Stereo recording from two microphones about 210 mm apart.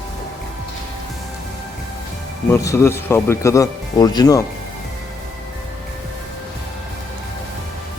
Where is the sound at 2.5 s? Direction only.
15° left (ahead or behind).